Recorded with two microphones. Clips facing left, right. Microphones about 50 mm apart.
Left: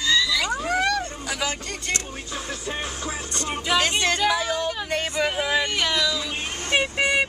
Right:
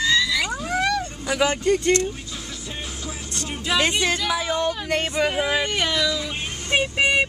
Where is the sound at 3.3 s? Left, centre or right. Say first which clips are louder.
Left 1 dB; centre.